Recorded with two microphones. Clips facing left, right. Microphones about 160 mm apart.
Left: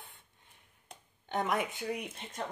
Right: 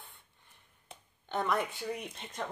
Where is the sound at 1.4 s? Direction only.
20° left (ahead or behind).